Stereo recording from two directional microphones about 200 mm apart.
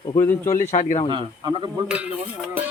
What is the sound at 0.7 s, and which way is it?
Speech, 35° left (ahead or behind).